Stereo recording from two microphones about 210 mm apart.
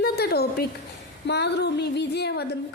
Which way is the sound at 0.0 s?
50° left (ahead or behind).